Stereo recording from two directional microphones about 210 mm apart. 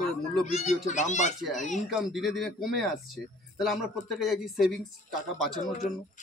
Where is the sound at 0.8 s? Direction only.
35° left (ahead or behind).